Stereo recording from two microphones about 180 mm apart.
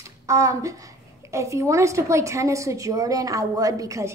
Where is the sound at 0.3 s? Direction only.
15° right (ahead or behind).